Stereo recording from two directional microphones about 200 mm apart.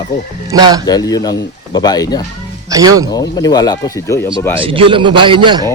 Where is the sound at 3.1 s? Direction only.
20° left (ahead or behind).